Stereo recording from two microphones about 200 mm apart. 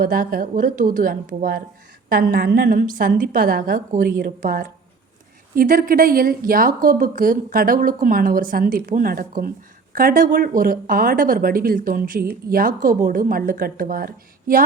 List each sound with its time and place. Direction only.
0.0 s speech: 45° right (ahead or behind)